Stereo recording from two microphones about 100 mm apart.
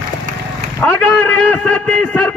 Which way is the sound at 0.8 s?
15° left (ahead or behind).